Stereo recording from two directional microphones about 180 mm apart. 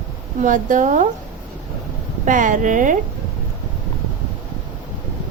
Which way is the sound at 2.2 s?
45° right (ahead or behind).